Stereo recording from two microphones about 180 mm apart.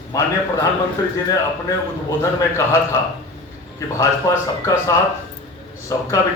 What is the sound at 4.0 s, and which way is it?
Speech, 15° left (ahead or behind).